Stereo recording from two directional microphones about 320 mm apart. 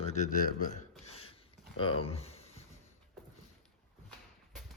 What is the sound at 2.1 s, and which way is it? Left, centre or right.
Speech, centre.